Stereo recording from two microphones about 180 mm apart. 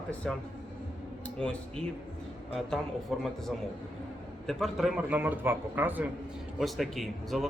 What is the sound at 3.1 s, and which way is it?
Speech, centre (ahead or behind).